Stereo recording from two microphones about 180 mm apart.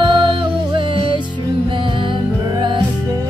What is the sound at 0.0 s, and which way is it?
Music, 25° right (ahead or behind).